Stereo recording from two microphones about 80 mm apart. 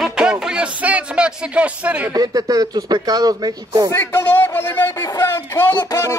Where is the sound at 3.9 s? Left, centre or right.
Left.